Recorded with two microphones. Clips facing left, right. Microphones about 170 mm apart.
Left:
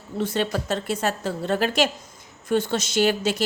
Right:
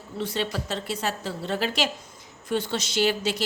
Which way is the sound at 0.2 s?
50° left (ahead or behind).